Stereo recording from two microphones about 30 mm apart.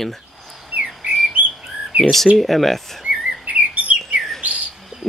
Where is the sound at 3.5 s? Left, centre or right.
Right.